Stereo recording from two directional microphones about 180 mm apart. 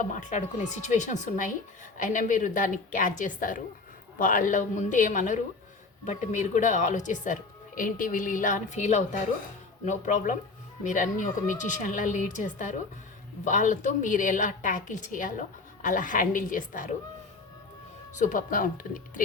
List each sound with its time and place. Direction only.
0.0 s a woman's voice: 45° left (ahead or behind)
18.1 s a woman's voice: 45° left (ahead or behind)